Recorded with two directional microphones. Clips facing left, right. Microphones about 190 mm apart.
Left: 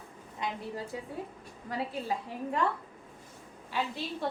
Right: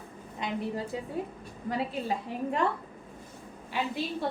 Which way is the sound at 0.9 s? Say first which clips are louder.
Right 4 dB; 20° right (ahead or behind).